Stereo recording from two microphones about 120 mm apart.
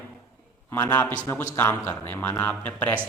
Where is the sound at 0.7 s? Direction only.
20° left (ahead or behind).